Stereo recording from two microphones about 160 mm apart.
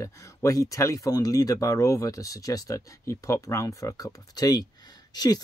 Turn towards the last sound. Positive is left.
turn(degrees=25)  # may be behind; listen again after turning